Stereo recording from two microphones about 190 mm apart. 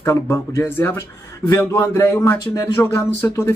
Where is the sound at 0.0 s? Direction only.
15° left (ahead or behind).